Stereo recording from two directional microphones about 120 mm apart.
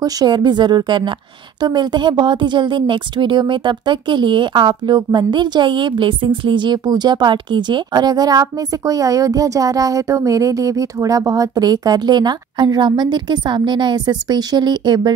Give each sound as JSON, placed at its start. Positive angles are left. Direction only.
{"t": 0.0, "sound": "a woman's voice", "side_deg": -35}